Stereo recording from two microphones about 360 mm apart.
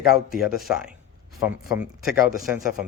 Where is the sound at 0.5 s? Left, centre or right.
Centre.